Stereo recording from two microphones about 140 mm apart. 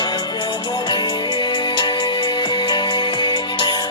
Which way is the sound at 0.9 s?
30° left (ahead or behind).